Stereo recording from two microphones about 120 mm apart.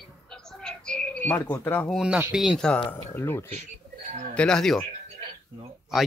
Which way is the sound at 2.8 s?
20° left (ahead or behind).